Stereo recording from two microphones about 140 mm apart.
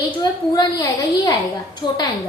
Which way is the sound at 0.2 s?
25° left (ahead or behind).